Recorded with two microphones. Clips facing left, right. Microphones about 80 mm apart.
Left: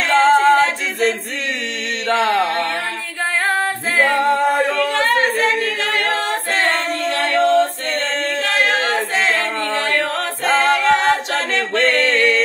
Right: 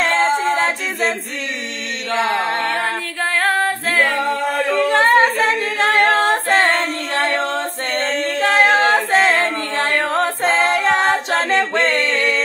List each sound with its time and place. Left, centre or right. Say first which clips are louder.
0.1 s a capella: left 5 dB; left
3.4 s a capella: right 2 dB; centre
4.7 s a capella: right 4 dB; right
9.4 s music: right 1 dB; right
10.1 s a capella: right 1 dB; right
11.7 s music: left 1 dB; right